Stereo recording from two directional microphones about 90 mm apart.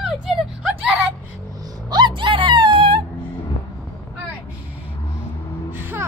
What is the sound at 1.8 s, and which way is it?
Music, 55° right (ahead or behind).